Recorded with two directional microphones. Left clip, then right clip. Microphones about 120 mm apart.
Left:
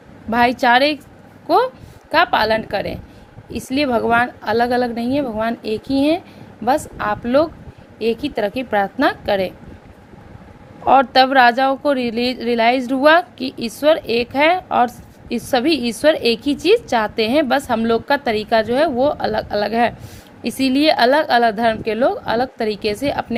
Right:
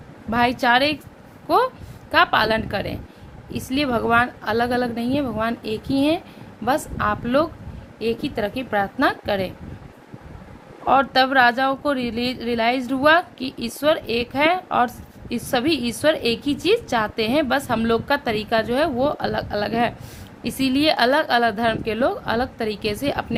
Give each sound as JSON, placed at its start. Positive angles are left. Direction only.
{"t": 0.3, "sound": "a woman's voice", "side_deg": 35}
{"t": 7.9, "sound": "speech", "side_deg": 40}
{"t": 10.8, "sound": "speech", "side_deg": 35}
{"t": 17.7, "sound": "a woman's voice", "side_deg": 20}